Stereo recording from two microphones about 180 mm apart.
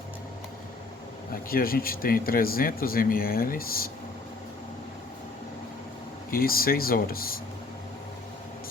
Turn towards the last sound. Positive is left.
turn(degrees=55)  # may be behind; listen again after turning